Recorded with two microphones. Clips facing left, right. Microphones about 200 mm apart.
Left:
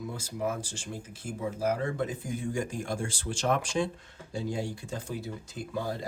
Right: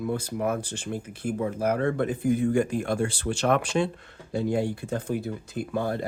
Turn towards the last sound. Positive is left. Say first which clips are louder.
# right 6 dB
turn(degrees=-60)  # may be behind; listen again after turning